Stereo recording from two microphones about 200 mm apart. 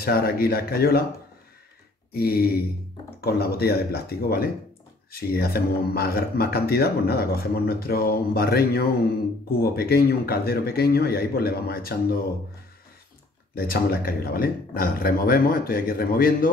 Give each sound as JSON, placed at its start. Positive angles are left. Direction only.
{"t": 0.0, "sound": "speech", "side_deg": 50}
{"t": 2.1, "sound": "speech", "side_deg": 50}
{"t": 13.6, "sound": "speech", "side_deg": 50}